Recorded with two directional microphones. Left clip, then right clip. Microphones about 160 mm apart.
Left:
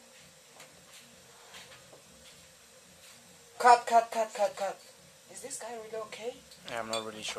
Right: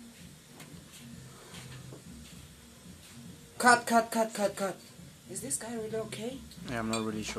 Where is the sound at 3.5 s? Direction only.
15° right (ahead or behind).